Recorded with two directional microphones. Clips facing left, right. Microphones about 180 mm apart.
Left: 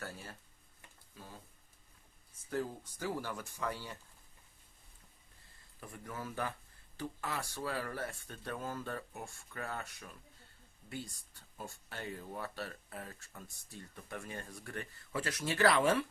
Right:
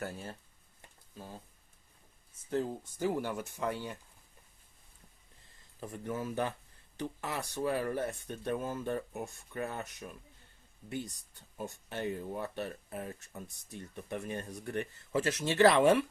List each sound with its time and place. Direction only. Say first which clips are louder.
0.0 s speech: right 6 dB; 25° right (ahead or behind)
2.5 s speech: right 4 dB; 25° right (ahead or behind)
5.8 s speech: right 7 dB; 25° right (ahead or behind)